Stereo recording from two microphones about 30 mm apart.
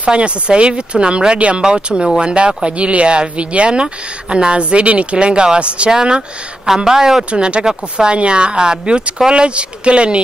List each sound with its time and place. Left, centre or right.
0.1 s speech: right
5.9 s speech: right
7.2 s speech: right